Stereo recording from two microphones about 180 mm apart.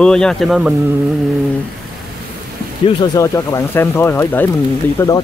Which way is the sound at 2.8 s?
25° left (ahead or behind).